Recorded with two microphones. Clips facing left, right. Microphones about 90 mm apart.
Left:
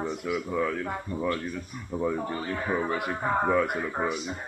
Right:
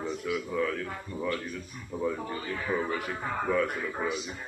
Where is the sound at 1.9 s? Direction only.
35° left (ahead or behind).